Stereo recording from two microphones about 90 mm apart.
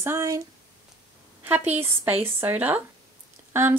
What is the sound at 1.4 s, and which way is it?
Speech, 20° right (ahead or behind).